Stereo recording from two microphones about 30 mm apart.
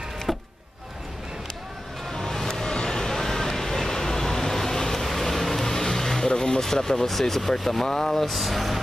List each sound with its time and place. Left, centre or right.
0.3 s a sound: centre
2.1 s vehicle: centre
2.6 s vehicle: left
5.0 s vehicle: centre
6.2 s vehicle: left
6.6 s speech: centre